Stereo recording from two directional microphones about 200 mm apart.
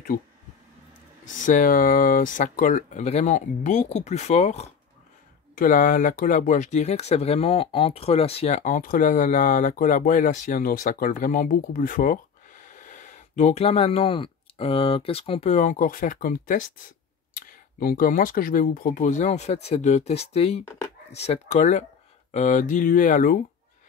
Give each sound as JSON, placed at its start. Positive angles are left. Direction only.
{"t": 1.4, "sound": "speech", "side_deg": 40}